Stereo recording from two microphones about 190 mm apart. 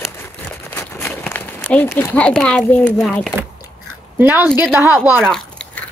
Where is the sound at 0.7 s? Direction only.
10° left (ahead or behind).